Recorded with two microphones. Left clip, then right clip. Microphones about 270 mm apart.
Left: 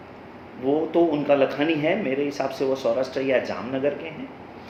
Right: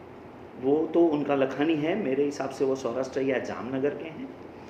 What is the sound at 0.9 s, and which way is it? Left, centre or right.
Speech, centre.